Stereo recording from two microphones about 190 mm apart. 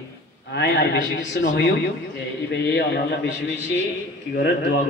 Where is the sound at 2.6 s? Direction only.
60° left (ahead or behind).